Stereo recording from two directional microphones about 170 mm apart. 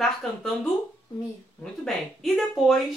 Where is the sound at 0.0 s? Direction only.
Centre (ahead or behind).